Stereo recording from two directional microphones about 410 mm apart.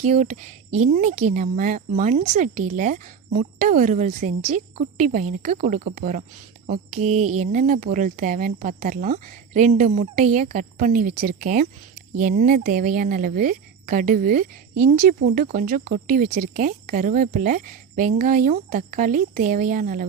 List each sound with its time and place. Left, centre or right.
0.1 s speech: centre